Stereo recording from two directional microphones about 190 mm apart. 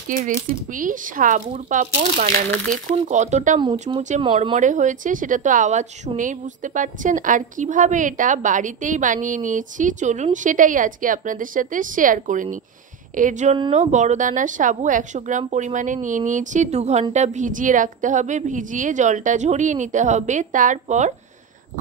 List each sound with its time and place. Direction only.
0.7 s a woman's voice: 45° right (ahead or behind)
2.5 s speech: 5° left (ahead or behind)
3.1 s a woman's voice: 40° right (ahead or behind)
4.2 s speech: 25° right (ahead or behind)
4.6 s a woman's voice: 40° right (ahead or behind)